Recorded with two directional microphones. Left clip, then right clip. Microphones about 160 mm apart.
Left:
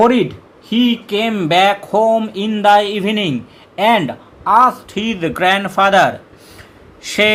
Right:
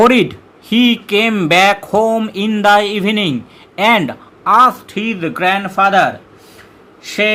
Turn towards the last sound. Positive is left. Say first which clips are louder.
# left 1 dB
turn(degrees=10)  # may be behind; listen again after turning